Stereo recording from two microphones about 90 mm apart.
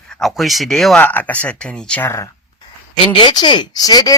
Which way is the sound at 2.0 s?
30° left (ahead or behind).